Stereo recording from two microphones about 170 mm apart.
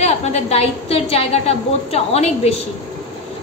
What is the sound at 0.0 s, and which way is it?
A woman's voice, 40° left (ahead or behind).